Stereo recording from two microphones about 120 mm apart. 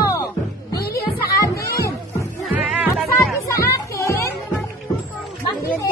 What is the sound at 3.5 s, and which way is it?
Children playing, 25° left (ahead or behind).